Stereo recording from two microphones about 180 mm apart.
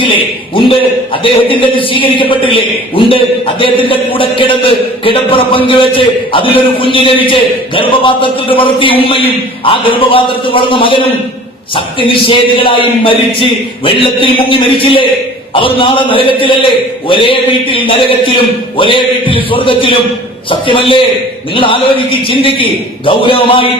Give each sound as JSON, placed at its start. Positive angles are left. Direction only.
{"t": 0.0, "sound": "a man's voice", "side_deg": 30}